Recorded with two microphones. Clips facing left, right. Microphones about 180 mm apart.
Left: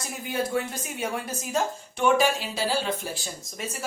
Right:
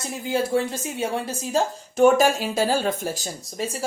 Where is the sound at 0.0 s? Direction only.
25° right (ahead or behind).